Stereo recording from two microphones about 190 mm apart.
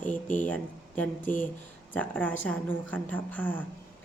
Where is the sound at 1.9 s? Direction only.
5° left (ahead or behind).